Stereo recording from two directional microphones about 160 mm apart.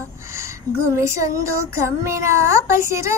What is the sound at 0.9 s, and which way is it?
Speech, 20° right (ahead or behind).